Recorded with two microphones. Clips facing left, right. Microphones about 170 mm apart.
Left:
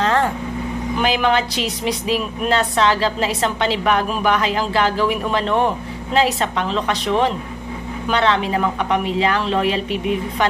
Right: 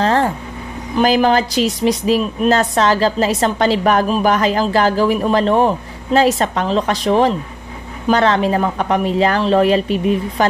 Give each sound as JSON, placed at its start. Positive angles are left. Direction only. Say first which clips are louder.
{"t": 0.0, "sound": "vehicle", "louder": "right 3 dB", "side_deg": -35}
{"t": 0.9, "sound": "a woman's voice", "louder": "right 5 dB", "side_deg": -35}